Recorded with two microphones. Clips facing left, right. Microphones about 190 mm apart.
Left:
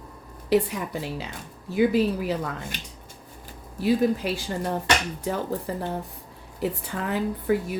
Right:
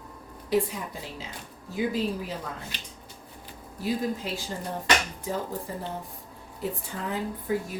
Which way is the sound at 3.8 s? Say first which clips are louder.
Left 7 dB; 70° left (ahead or behind).